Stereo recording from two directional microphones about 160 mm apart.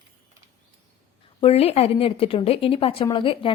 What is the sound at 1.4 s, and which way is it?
A woman's voice, 40° left (ahead or behind).